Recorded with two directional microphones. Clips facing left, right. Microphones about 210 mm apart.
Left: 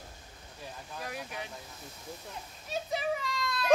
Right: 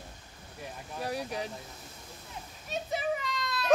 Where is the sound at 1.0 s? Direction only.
35° right (ahead or behind).